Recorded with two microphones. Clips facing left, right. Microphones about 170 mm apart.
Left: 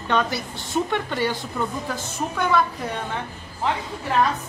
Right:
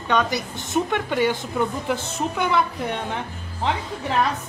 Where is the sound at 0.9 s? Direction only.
10° right (ahead or behind).